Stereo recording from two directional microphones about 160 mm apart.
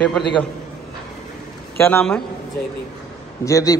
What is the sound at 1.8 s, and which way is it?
Speech, 15° left (ahead or behind).